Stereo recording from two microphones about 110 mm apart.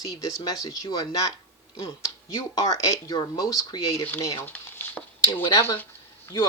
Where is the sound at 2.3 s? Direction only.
30° left (ahead or behind).